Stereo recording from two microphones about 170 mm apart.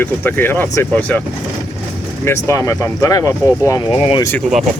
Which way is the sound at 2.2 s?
15° left (ahead or behind).